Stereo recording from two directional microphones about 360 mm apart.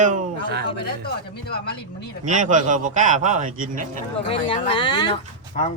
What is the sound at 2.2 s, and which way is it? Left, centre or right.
Speech, right.